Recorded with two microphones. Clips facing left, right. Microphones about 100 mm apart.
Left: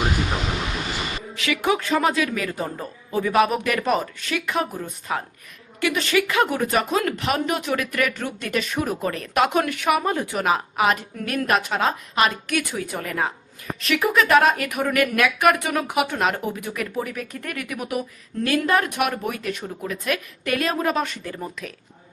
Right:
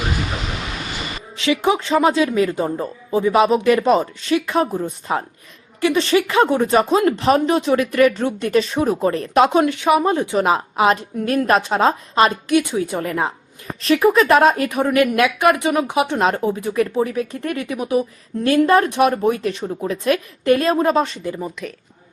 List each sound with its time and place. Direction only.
1.4 s speech: 25° right (ahead or behind)
21.3 s speech: 5° right (ahead or behind)